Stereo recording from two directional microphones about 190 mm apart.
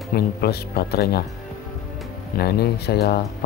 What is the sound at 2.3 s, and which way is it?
Speech, 55° left (ahead or behind).